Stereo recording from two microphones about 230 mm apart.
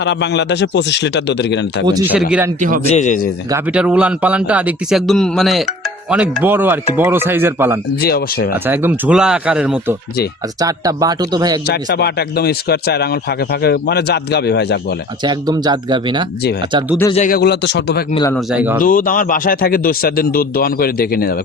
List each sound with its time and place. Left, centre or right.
0.0 s speech: left
2.6 s a man's voice: right
2.8 s speech: left
3.5 s speech: centre
8.0 s speech: left
8.6 s speech: centre
10.6 s speech: centre
11.6 s speech: left
15.2 s speech: centre
17.1 s speech: left
18.1 s speech: centre
18.3 s speech: centre
18.8 s speech: left